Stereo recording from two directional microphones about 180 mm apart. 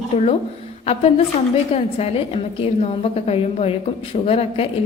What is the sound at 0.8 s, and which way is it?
A woman's voice, 35° left (ahead or behind).